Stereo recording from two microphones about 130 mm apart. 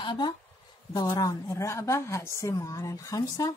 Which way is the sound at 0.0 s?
35° left (ahead or behind).